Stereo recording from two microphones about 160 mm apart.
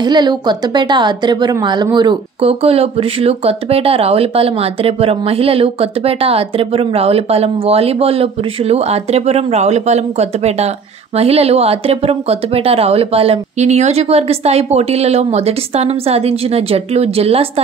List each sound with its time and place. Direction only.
0.0 s a woman's voice: 25° right (ahead or behind)